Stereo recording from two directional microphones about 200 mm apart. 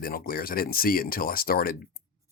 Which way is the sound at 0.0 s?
45° left (ahead or behind).